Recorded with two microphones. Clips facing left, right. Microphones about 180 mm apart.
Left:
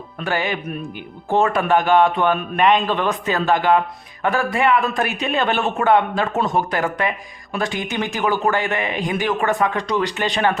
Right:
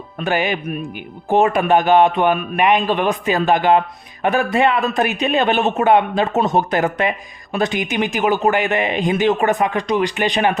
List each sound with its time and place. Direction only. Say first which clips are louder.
0.2 s a man's voice: right 3 dB; 20° right (ahead or behind)